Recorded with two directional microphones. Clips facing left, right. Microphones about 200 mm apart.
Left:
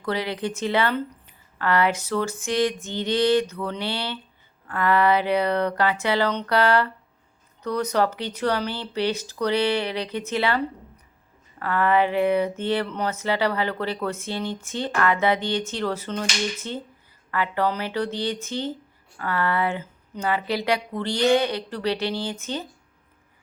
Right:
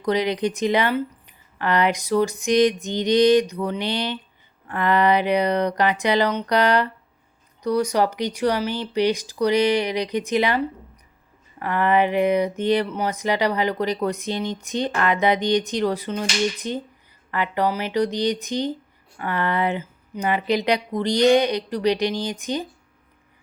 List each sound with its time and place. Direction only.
0.0 s speech: 15° right (ahead or behind)